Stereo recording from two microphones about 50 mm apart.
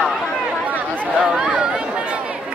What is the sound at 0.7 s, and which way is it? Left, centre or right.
Chatter, right.